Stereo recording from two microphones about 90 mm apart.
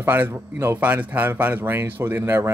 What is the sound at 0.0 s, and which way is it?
Speech, 25° right (ahead or behind).